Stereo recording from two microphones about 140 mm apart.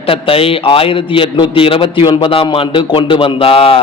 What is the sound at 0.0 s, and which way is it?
A man's voice, 40° left (ahead or behind).